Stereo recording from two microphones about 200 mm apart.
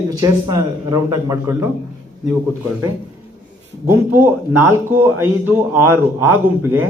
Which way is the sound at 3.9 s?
10° right (ahead or behind).